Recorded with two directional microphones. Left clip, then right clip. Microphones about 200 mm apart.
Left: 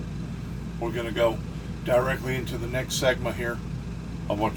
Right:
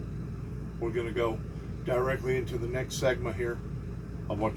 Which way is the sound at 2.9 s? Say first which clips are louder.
Left 6 dB; 40° left (ahead or behind).